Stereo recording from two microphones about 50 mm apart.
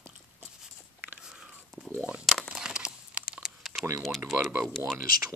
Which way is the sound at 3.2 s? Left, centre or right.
Centre.